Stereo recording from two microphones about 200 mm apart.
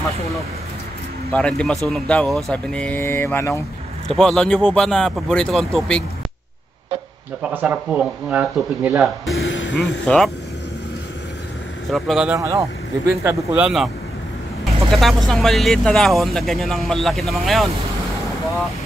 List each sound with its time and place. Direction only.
1.3 s speech: 5° left (ahead or behind)
7.5 s speech: 5° right (ahead or behind)
9.4 s a sound: 70° left (ahead or behind)
10.0 s speech: 5° left (ahead or behind)
11.9 s speech: centre (ahead or behind)
12.4 s speech: 15° right (ahead or behind)
14.9 s speech: centre (ahead or behind)